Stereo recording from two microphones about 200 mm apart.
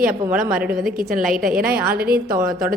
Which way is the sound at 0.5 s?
5° right (ahead or behind).